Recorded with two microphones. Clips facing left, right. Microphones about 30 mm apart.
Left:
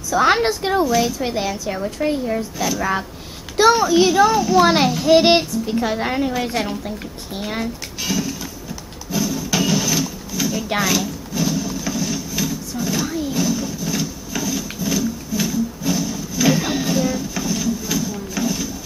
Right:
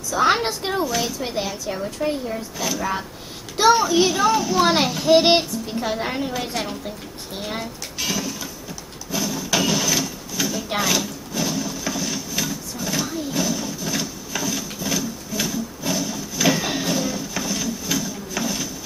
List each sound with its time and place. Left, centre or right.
0.1 s a child's voice: centre
3.5 s a child's voice: centre
8.0 s music: centre
9.1 s a sound: centre
10.8 s drawer open or close: centre